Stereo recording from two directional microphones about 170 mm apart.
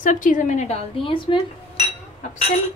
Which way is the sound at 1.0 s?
30° left (ahead or behind).